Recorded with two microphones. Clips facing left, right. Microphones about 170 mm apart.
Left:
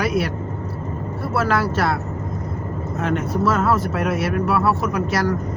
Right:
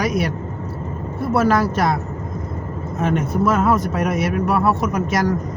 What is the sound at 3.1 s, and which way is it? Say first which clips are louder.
Speech: right 1 dB; 15° right (ahead or behind).